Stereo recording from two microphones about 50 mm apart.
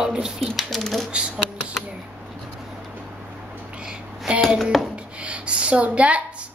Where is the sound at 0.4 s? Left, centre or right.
Centre.